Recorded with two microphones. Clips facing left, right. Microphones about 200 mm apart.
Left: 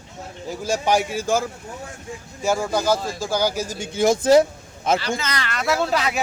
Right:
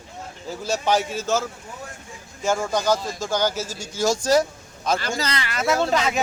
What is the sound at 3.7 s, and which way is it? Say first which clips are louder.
Speech: left 4 dB; 55° left (ahead or behind).